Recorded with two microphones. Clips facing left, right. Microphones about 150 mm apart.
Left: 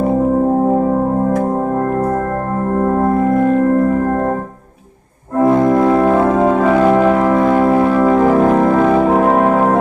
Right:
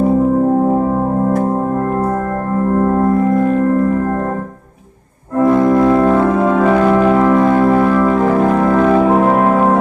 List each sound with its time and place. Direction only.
3.0 s music: 25° left (ahead or behind)
5.4 s organ: 20° left (ahead or behind)
7.5 s music: 20° left (ahead or behind)